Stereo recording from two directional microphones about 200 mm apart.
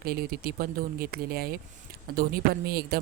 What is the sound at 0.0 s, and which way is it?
Speech, 50° right (ahead or behind).